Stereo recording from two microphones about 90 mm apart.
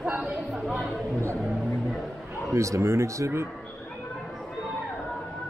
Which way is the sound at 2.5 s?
35° right (ahead or behind).